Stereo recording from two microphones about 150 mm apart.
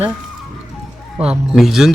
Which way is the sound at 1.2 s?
5° right (ahead or behind).